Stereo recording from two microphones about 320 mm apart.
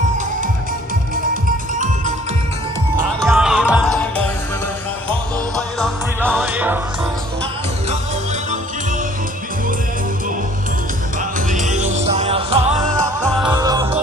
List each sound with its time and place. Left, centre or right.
1.3 s music: right
3.2 s music: centre
5.8 s music: centre
11.5 s music: right